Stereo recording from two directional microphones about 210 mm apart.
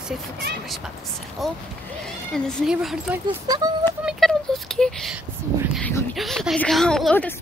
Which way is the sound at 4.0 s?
Centre (ahead or behind).